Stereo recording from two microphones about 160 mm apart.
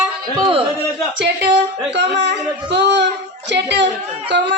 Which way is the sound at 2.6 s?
90° right.